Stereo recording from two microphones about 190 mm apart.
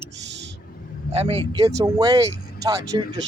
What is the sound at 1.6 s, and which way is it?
Speech, 20° right (ahead or behind).